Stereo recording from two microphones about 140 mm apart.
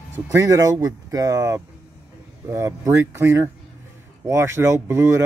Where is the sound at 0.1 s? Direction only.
20° right (ahead or behind).